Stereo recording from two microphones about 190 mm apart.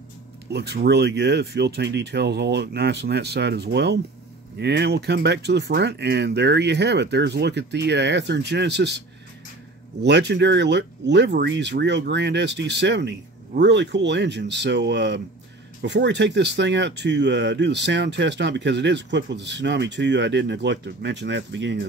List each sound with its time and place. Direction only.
0.5 s speech: 60° right (ahead or behind)
10.0 s speech: 65° right (ahead or behind)